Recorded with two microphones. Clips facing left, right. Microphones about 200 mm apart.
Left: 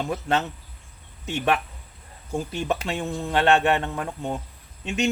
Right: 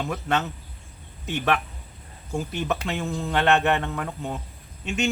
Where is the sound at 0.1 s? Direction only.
30° left (ahead or behind).